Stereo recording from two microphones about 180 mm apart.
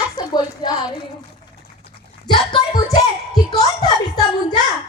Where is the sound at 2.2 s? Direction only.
25° left (ahead or behind).